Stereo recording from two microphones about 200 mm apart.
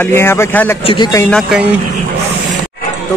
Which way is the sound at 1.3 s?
Centre (ahead or behind).